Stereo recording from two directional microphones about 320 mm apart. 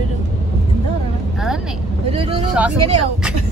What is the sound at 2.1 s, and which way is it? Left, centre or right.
Speech, centre.